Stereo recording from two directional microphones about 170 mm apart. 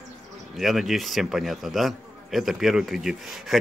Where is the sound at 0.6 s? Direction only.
Centre (ahead or behind).